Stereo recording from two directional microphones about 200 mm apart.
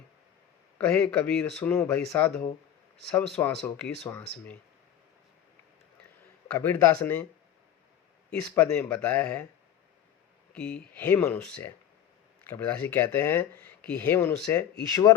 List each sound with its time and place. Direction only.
0.8 s speech: 5° left (ahead or behind)
6.6 s speech: 10° left (ahead or behind)
8.3 s speech: 5° left (ahead or behind)
10.5 s speech: 5° left (ahead or behind)